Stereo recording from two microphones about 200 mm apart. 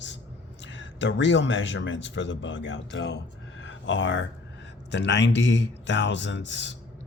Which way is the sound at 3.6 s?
65° left (ahead or behind).